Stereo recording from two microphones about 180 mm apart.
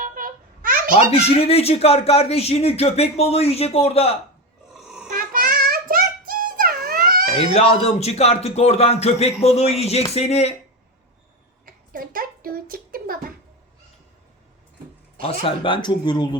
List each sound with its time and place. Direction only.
0.0 s a sound: 50° right (ahead or behind)
0.9 s speech: 35° left (ahead or behind)
4.7 s snoring: 5° right (ahead or behind)
5.1 s child singing: 50° right (ahead or behind)
7.5 s speech: 35° left (ahead or behind)
11.6 s a sound: 50° right (ahead or behind)
15.2 s speech: 30° left (ahead or behind)